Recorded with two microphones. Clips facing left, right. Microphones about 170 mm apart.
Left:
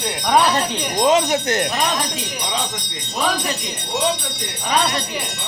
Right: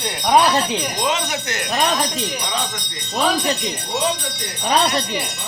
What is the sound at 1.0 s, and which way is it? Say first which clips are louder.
Speech: left 6 dB; 40° left (ahead or behind).